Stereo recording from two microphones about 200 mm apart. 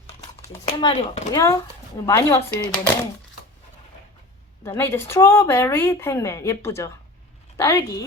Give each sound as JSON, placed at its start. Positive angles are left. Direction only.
{"t": 0.7, "sound": "a woman's voice", "side_deg": 25}
{"t": 4.6, "sound": "a woman's voice", "side_deg": 10}